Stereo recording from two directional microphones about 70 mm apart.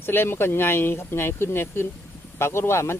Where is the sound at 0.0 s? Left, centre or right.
Left.